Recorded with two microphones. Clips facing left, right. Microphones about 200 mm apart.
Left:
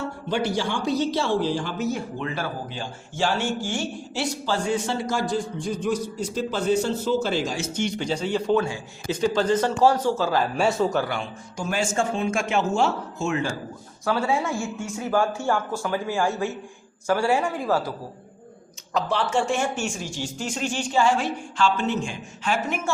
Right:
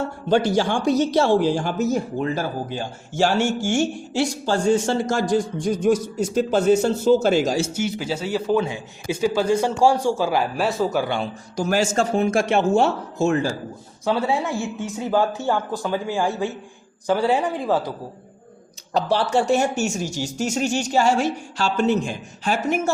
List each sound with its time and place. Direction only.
0.4 s a man's voice: 45° right (ahead or behind)
7.7 s a man's voice: 5° right (ahead or behind)
10.6 s speech: centre (ahead or behind)
11.1 s speech: 35° right (ahead or behind)
14.0 s a man's voice: 20° right (ahead or behind)
18.9 s speech: 35° right (ahead or behind)